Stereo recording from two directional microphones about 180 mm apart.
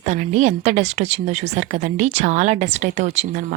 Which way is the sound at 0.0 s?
45° right (ahead or behind).